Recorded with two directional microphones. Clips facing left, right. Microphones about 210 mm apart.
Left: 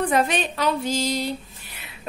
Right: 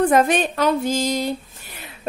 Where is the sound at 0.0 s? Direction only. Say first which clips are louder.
Right 5 dB; 45° right (ahead or behind).